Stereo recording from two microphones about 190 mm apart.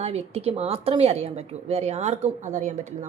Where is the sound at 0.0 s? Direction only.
30° right (ahead or behind).